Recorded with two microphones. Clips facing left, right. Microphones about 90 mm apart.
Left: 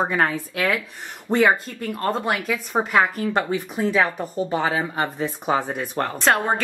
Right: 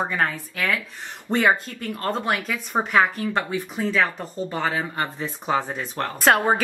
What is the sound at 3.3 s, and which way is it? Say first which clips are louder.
Speech: left 2 dB; 15° left (ahead or behind).